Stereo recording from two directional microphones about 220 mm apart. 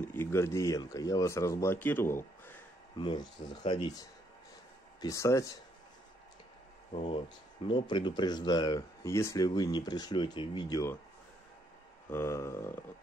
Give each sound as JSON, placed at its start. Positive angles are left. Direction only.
{"t": 0.0, "sound": "speech", "side_deg": 10}
{"t": 3.0, "sound": "speech", "side_deg": 20}
{"t": 6.9, "sound": "speech", "side_deg": 30}
{"t": 12.1, "sound": "speech", "side_deg": 10}